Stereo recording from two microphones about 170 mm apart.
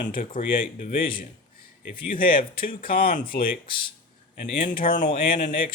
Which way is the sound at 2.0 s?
55° left (ahead or behind).